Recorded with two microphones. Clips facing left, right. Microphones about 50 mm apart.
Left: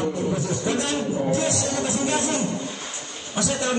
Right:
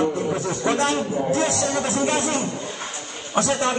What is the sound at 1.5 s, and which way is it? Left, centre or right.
Speech, right.